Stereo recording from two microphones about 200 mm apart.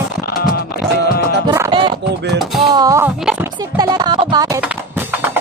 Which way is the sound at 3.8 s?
20° right (ahead or behind).